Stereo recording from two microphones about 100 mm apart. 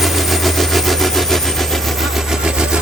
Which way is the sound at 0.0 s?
Centre (ahead or behind).